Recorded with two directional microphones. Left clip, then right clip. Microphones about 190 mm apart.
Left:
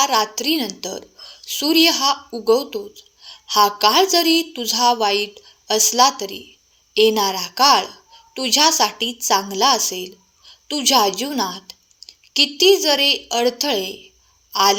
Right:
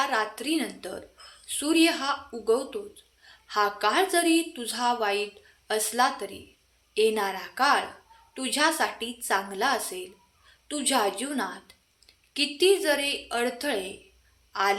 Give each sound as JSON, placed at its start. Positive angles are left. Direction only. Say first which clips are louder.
{"t": 0.0, "sound": "a woman's voice", "louder": "left 9 dB", "side_deg": 35}